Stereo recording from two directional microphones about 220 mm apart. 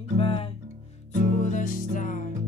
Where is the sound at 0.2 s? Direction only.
25° left (ahead or behind).